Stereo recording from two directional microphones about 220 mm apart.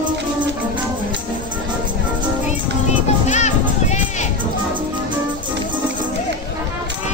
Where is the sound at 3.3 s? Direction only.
30° left (ahead or behind).